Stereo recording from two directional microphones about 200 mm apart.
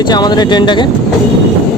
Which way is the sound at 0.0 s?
20° left (ahead or behind).